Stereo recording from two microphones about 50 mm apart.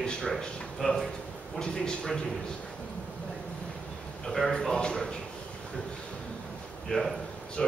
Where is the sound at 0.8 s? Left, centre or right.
Centre.